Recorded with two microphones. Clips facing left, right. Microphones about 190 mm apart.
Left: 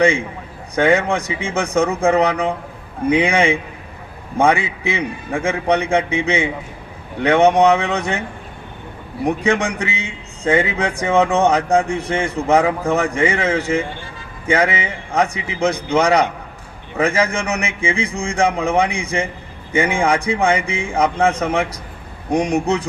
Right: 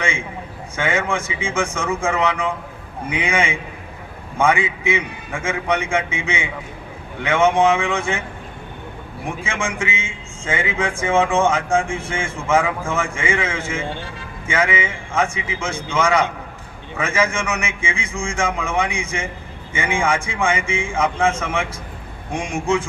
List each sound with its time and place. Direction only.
0.8 s a man's voice: 35° left (ahead or behind)
9.2 s a man's voice: 40° left (ahead or behind)